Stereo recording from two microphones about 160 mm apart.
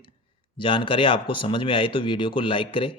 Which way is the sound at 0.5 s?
30° left (ahead or behind).